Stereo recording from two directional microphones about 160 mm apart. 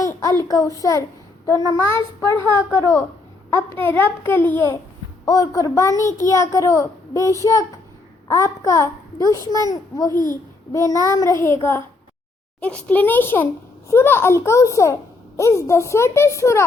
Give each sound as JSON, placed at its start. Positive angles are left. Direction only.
{"t": 0.0, "sound": "a child's voice", "side_deg": 20}